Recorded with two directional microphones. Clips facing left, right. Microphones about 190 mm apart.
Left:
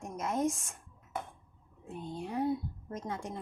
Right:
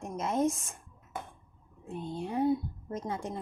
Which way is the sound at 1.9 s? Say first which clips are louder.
Right 3 dB; 30° right (ahead or behind).